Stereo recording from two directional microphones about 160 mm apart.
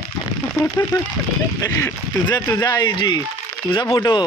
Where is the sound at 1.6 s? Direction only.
20° left (ahead or behind).